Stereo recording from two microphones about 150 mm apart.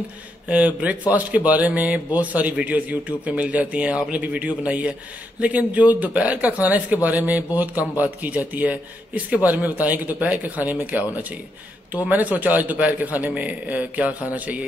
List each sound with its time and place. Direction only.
0.5 s a man's voice: 10° right (ahead or behind)